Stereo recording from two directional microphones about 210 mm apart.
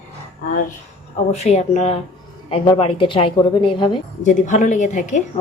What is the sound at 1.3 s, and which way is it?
A woman's voice, 30° left (ahead or behind).